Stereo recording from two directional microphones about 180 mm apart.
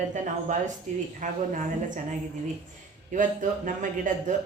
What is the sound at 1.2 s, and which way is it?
Speech, 45° right (ahead or behind).